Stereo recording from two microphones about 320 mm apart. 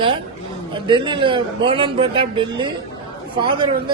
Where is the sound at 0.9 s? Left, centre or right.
Centre.